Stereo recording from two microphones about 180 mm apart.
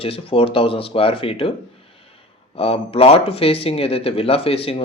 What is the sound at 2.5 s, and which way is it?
Speech, 35° left (ahead or behind).